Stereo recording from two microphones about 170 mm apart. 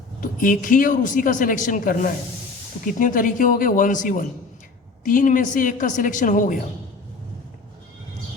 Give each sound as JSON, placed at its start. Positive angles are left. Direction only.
{"t": 0.2, "sound": "a woman's voice", "side_deg": 50}